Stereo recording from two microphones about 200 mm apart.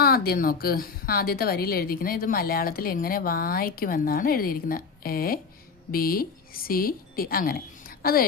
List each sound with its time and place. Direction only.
0.0 s a woman's voice: 50° left (ahead or behind)